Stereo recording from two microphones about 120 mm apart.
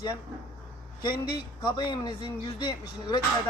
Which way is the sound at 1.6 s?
40° left (ahead or behind).